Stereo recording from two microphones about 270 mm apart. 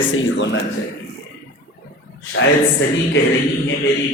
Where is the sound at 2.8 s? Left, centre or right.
Left.